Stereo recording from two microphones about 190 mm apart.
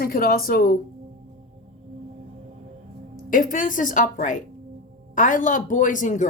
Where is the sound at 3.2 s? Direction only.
45° left (ahead or behind).